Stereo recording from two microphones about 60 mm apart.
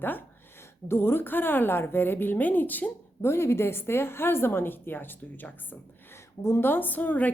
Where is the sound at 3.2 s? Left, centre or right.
Left.